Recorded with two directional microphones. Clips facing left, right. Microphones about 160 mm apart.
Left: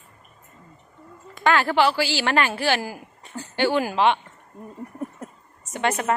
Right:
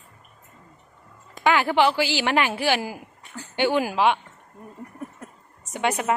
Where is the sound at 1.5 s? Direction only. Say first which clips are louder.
Even; 15° right (ahead or behind).